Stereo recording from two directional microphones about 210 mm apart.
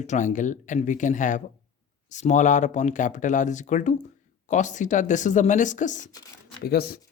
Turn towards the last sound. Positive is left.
turn(degrees=45)  # may be behind; listen again after turning